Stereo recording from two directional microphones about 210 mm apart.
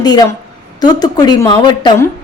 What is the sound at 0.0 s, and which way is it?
A woman's voice, 20° left (ahead or behind).